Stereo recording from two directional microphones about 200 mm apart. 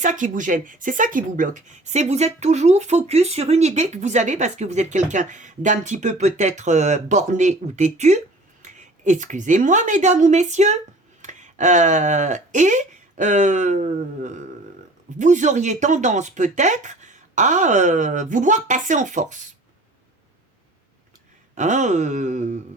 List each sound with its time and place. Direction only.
0.0 s speech: 40° right (ahead or behind)
21.5 s speech: 35° right (ahead or behind)